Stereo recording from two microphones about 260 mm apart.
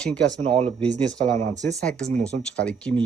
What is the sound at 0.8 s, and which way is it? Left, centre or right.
Speech, centre.